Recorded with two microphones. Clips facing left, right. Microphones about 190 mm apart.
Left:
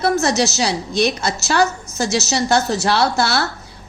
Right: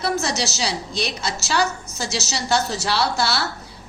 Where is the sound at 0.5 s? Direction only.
50° left (ahead or behind).